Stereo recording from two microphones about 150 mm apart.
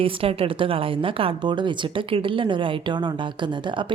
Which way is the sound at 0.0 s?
40° right (ahead or behind).